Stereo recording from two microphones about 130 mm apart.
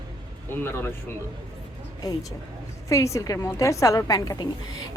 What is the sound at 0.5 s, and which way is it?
Speech, 15° left (ahead or behind).